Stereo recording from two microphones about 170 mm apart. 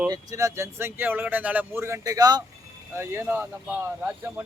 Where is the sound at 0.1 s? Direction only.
20° right (ahead or behind).